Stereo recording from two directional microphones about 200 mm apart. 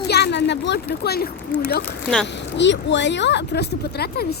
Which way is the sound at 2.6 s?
60° left (ahead or behind).